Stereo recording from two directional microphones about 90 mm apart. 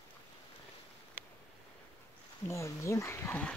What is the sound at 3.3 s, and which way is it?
Speech, 15° left (ahead or behind).